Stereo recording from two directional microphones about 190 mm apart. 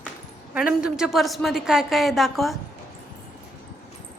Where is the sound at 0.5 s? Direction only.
5° right (ahead or behind).